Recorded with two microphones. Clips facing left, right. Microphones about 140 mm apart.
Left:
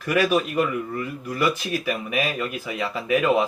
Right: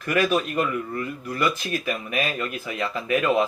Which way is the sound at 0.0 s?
10° left (ahead or behind).